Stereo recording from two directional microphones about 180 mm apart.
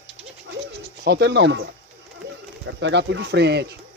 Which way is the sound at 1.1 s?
70° right (ahead or behind).